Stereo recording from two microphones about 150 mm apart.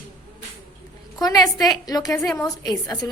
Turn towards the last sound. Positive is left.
turn(degrees=25)  # may be behind; listen again after turning